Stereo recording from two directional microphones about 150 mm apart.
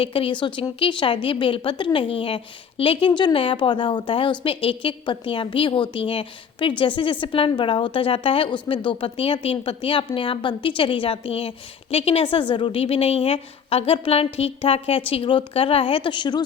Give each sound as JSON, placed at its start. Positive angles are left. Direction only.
{"t": 0.0, "sound": "a woman's voice", "side_deg": 35}